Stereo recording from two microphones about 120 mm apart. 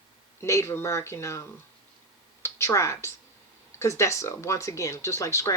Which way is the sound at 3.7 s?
25° left (ahead or behind).